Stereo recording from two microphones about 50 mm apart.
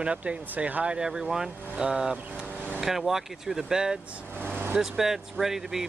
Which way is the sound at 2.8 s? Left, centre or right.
Centre.